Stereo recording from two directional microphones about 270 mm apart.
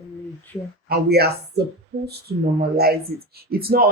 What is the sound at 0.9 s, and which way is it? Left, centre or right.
Speech, right.